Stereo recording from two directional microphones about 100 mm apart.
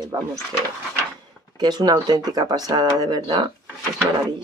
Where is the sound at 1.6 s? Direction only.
45° right (ahead or behind).